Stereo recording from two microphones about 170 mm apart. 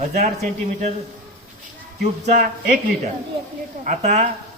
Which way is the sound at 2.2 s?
45° right (ahead or behind).